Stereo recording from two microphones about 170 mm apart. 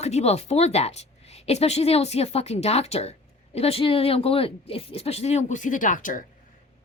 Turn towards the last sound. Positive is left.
turn(degrees=50)  # may be behind; listen again after turning